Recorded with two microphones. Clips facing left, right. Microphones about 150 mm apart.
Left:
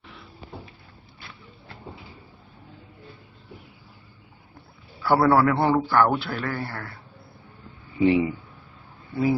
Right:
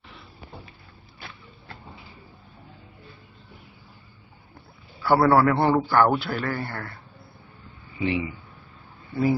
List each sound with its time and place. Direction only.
5.0 s speech: centre (ahead or behind)
7.9 s speech: 40° left (ahead or behind)